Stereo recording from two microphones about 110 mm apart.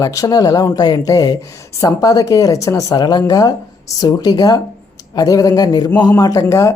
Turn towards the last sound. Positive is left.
turn(degrees=30)  # may be behind; listen again after turning